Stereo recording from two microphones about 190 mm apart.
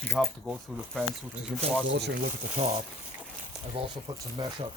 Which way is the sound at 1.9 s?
60° right (ahead or behind).